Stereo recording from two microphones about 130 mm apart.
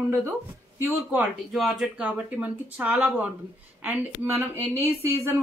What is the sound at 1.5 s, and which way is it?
A woman's voice, centre (ahead or behind).